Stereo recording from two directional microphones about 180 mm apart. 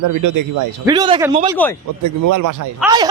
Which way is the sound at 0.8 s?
20° right (ahead or behind).